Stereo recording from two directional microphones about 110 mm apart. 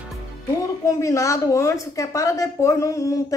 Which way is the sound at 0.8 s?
30° left (ahead or behind).